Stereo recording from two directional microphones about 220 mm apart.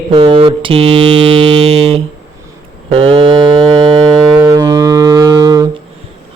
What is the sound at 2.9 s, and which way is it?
Foghorn, 25° right (ahead or behind).